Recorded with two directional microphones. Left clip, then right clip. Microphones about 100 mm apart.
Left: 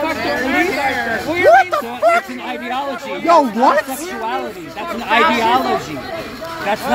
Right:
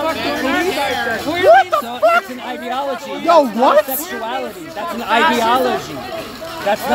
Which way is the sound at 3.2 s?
20° right (ahead or behind).